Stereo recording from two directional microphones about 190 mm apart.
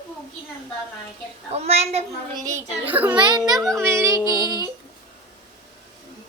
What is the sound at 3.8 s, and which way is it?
Music, 15° right (ahead or behind).